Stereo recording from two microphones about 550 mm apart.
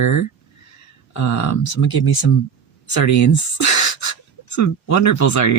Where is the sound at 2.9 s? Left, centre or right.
Left.